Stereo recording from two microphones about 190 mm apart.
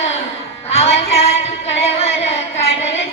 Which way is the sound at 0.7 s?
35° left (ahead or behind).